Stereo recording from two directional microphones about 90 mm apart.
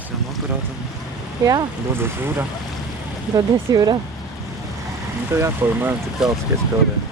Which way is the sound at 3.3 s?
45° right (ahead or behind).